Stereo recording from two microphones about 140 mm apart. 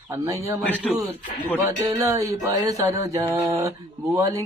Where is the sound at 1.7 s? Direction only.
25° right (ahead or behind).